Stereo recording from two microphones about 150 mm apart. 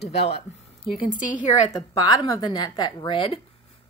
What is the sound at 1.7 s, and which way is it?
A woman's voice, 25° left (ahead or behind).